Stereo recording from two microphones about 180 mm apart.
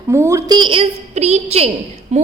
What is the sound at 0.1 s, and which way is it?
A woman's voice, 20° right (ahead or behind).